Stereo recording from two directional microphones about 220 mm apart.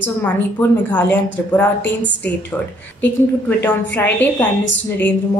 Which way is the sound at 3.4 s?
10° left (ahead or behind).